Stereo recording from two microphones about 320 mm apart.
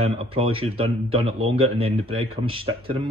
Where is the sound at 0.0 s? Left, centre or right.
Centre.